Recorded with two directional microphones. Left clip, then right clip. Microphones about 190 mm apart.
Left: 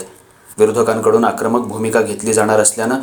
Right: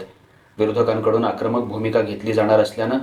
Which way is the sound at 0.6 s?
45° left (ahead or behind).